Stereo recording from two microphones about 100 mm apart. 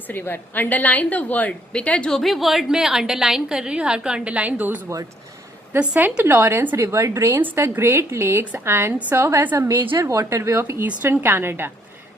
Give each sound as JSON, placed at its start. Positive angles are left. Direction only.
{"t": 0.1, "sound": "a woman's voice", "side_deg": 20}